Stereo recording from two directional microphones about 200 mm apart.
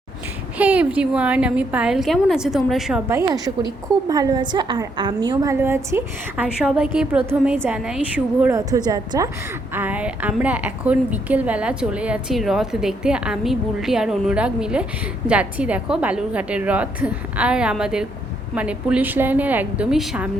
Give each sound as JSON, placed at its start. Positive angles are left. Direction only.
{"t": 0.6, "sound": "a woman's voice", "side_deg": -5}
{"t": 3.1, "sound": "a woman's voice", "side_deg": -15}